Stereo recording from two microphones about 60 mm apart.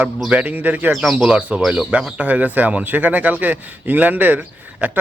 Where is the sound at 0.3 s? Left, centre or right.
Right.